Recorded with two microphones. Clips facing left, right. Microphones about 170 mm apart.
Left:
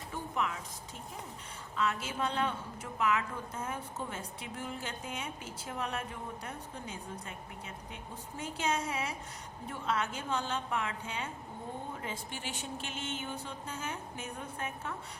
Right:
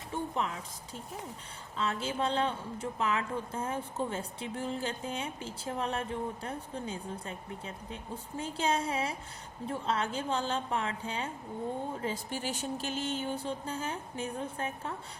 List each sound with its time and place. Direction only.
0.1 s speech: 30° right (ahead or behind)
1.7 s a woman's voice: 30° right (ahead or behind)